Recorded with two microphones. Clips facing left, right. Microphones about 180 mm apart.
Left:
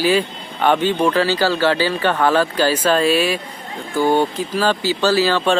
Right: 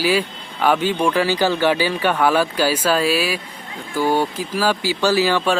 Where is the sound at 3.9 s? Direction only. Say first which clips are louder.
Left 2 dB; 20° left (ahead or behind).